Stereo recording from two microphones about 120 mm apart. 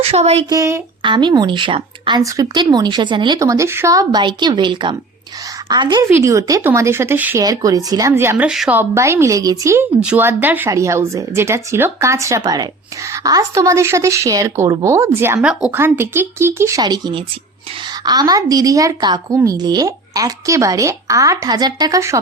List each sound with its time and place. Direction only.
0.0 s speech: 60° right (ahead or behind)
0.5 s speech: 25° right (ahead or behind)
1.0 s speech: 40° right (ahead or behind)
2.2 s speech: 30° right (ahead or behind)
3.3 s speech: 25° right (ahead or behind)
6.1 s speech: 25° right (ahead or behind)
7.3 s speech: 30° right (ahead or behind)
8.4 s speech: 5° right (ahead or behind)
8.7 s speech: 20° right (ahead or behind)
10.0 s speech: 10° right (ahead or behind)
15.4 s speech: 5° right (ahead or behind)
15.7 s speech: 20° right (ahead or behind)
16.8 s speech: 35° right (ahead or behind)